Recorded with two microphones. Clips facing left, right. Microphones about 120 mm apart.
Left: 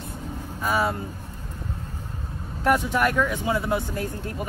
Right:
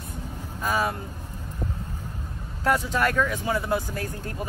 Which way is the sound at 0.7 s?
25° left (ahead or behind).